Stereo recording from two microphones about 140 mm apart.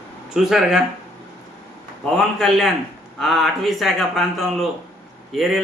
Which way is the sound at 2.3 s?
Centre (ahead or behind).